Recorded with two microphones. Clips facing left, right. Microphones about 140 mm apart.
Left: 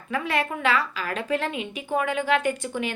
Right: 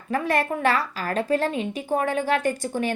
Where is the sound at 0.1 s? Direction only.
40° right (ahead or behind).